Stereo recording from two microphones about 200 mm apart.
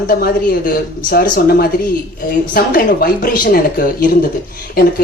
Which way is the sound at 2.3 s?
45° left (ahead or behind).